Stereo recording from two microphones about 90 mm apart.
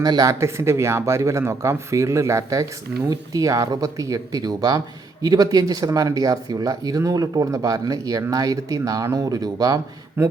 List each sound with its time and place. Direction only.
0.0 s speech: 45° right (ahead or behind)
0.3 s speech: 30° right (ahead or behind)
10.2 s speech: 30° right (ahead or behind)